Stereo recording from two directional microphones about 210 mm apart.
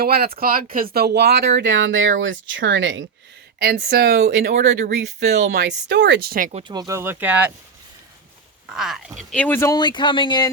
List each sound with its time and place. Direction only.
0.0 s speech: 45° right (ahead or behind)
3.6 s speech: 50° right (ahead or behind)
4.5 s speech: 35° right (ahead or behind)
5.5 s speech: 55° right (ahead or behind); by 7.5 s 10° right (ahead or behind)
8.7 s speech: centre (ahead or behind); by 10.5 s 20° left (ahead or behind)